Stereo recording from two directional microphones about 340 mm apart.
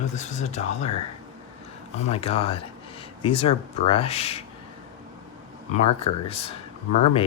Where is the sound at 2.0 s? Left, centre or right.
Centre.